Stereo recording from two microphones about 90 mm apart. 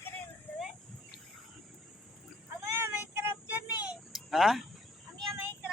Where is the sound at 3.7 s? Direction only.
15° right (ahead or behind).